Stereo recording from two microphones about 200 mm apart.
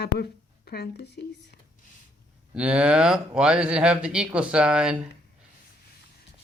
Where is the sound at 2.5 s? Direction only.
5° right (ahead or behind).